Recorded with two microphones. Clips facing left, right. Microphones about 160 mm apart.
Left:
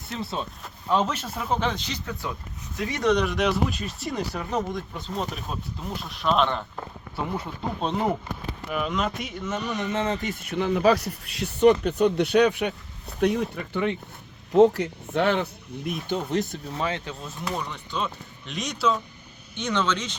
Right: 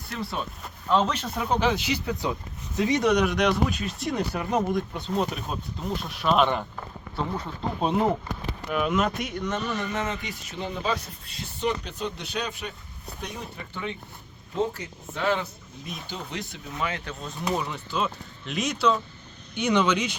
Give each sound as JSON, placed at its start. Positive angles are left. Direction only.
{"t": 0.1, "sound": "speech", "side_deg": 25}
{"t": 0.9, "sound": "speech", "side_deg": 10}
{"t": 7.8, "sound": "speech", "side_deg": -5}
{"t": 10.0, "sound": "speech", "side_deg": 40}
{"t": 10.4, "sound": "speech", "side_deg": 65}
{"t": 11.7, "sound": "speech", "side_deg": 60}
{"t": 16.0, "sound": "speech", "side_deg": 50}
{"t": 16.7, "sound": "speech", "side_deg": 30}
{"t": 17.4, "sound": "speech", "side_deg": -10}
{"t": 19.5, "sound": "speech", "side_deg": -10}